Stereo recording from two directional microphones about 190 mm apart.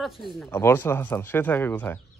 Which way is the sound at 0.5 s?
10° left (ahead or behind).